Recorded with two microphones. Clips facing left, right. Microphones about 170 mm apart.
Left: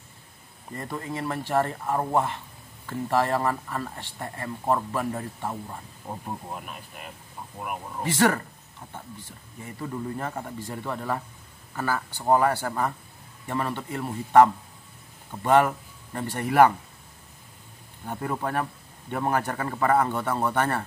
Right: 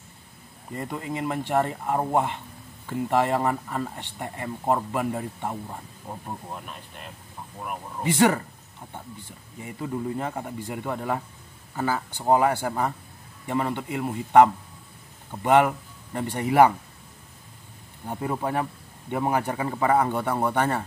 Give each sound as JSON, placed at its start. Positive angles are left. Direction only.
{"t": 0.7, "sound": "speech", "side_deg": -15}
{"t": 6.0, "sound": "speech", "side_deg": 5}
{"t": 8.0, "sound": "speech", "side_deg": -15}
{"t": 9.6, "sound": "speech", "side_deg": -15}
{"t": 18.0, "sound": "speech", "side_deg": -15}